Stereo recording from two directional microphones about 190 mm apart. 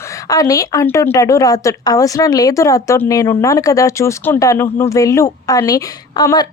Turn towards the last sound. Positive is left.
turn(degrees=20)  # may be behind; listen again after turning